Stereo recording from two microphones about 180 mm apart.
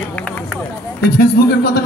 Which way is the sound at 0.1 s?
5° left (ahead or behind).